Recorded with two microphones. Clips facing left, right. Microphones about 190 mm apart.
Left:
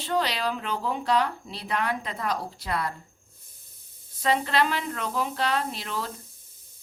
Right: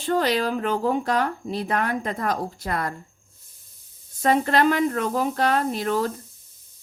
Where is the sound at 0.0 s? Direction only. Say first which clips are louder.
Right 5 dB; 45° right (ahead or behind).